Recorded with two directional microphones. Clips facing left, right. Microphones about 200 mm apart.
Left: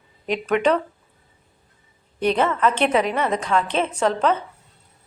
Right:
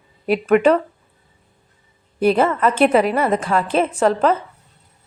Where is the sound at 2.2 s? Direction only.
5° right (ahead or behind).